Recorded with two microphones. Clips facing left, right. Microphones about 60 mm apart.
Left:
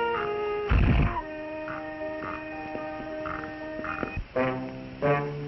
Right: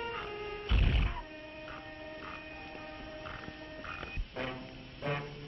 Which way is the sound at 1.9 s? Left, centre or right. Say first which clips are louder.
Left 11 dB; left.